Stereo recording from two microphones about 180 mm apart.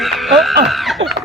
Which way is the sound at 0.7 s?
Centre (ahead or behind).